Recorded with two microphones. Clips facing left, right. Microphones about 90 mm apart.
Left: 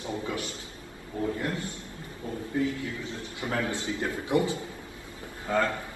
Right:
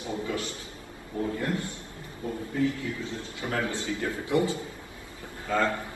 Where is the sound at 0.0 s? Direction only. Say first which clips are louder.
Right 1 dB; 20° left (ahead or behind).